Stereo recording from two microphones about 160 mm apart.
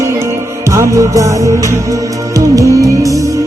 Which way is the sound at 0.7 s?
20° right (ahead or behind).